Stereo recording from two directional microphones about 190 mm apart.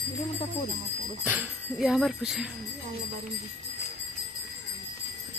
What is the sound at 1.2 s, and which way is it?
Speech, 10° right (ahead or behind).